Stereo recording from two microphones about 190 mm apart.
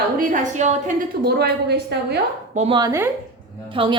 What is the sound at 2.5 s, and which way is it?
Speech, 35° right (ahead or behind).